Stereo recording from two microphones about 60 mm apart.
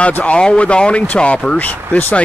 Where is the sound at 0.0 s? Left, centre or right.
Centre.